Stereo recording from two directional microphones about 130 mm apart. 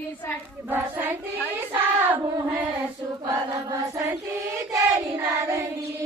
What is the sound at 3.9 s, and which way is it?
Child singing, 20° right (ahead or behind).